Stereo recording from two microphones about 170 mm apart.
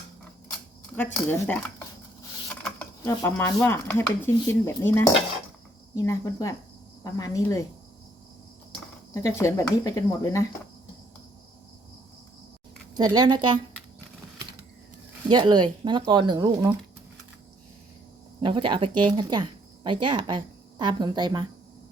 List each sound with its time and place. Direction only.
0.9 s speech: 10° left (ahead or behind)
2.5 s a sound: 10° left (ahead or behind)
3.1 s speech: 15° left (ahead or behind)
9.1 s speech: 15° left (ahead or behind)
13.0 s speech: 25° right (ahead or behind)
15.3 s speech: 25° right (ahead or behind)
18.3 s speech: 30° right (ahead or behind)